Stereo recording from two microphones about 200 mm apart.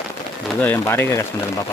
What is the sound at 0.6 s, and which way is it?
Speech, 10° left (ahead or behind).